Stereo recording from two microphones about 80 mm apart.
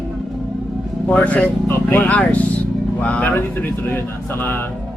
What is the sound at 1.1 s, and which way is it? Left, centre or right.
Speech, centre.